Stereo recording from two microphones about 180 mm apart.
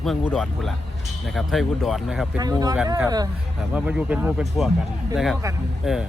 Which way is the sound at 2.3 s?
20° right (ahead or behind).